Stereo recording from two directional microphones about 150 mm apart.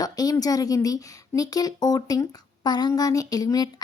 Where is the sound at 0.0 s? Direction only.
25° left (ahead or behind).